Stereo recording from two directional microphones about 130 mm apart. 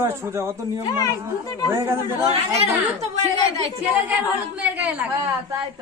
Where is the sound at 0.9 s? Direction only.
25° left (ahead or behind).